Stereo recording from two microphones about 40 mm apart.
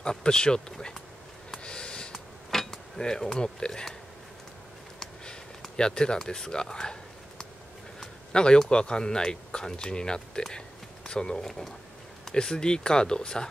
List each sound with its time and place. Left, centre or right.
0.0 s speech: centre
1.6 s snort: left
2.5 s speech: centre
5.0 s a sound: centre
8.0 s a man's voice: left